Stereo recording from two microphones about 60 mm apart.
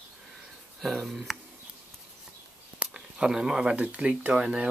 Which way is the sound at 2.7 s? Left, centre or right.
Centre.